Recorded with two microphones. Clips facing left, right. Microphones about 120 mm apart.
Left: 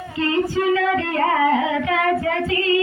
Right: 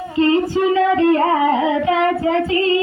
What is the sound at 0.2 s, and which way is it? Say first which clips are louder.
Singing: right 5 dB; 30° right (ahead or behind).